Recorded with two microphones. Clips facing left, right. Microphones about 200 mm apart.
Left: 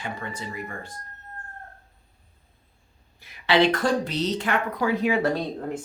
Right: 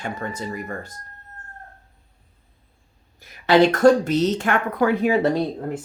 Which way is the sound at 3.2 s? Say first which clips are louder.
Right 5 dB; 45° right (ahead or behind).